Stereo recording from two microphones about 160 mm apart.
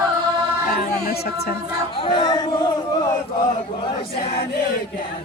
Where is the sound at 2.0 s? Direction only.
30° left (ahead or behind).